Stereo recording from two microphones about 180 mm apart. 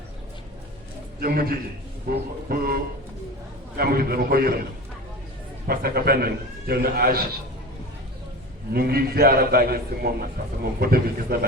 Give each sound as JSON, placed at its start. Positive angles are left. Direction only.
{"t": 1.2, "sound": "a man's voice", "side_deg": -55}
{"t": 5.6, "sound": "a man's voice", "side_deg": -55}
{"t": 8.7, "sound": "a man's voice", "side_deg": -55}